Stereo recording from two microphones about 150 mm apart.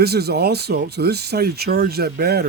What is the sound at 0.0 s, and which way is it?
Speech, 90° right.